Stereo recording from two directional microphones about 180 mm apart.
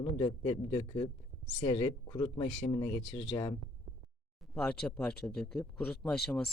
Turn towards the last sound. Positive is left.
turn(degrees=0)  # may be behind; listen again after turning